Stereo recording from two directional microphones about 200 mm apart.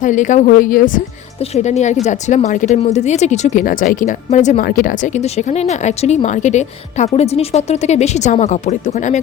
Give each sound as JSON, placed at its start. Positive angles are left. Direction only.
{"t": 0.0, "sound": "speech", "side_deg": 40}